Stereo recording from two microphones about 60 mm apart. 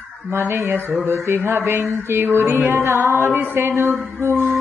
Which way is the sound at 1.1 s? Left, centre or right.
Right.